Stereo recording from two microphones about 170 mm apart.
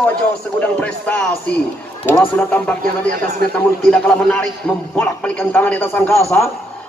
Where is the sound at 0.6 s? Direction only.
10° left (ahead or behind).